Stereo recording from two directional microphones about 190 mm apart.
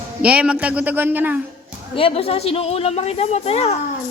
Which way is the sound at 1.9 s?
30° left (ahead or behind).